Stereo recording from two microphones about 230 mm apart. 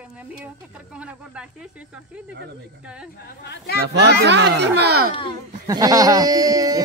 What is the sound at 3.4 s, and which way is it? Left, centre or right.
Speech, left.